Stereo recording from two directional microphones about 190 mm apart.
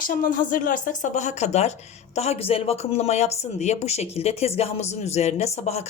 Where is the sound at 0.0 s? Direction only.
50° left (ahead or behind).